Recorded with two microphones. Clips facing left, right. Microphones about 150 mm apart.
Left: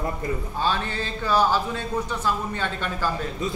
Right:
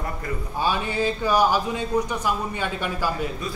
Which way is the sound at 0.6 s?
10° right (ahead or behind).